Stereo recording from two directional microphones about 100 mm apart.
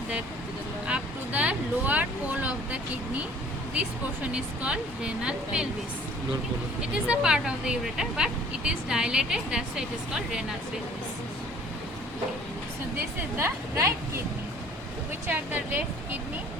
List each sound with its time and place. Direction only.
0.9 s a sound: 10° right (ahead or behind)
3.8 s speech: 15° right (ahead or behind)
6.9 s speech: 10° right (ahead or behind)
13.3 s a woman's voice: 25° right (ahead or behind)
15.3 s a woman's voice: 20° right (ahead or behind)